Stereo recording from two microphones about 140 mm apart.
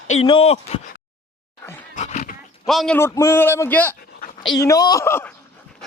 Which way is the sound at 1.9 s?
55° left (ahead or behind).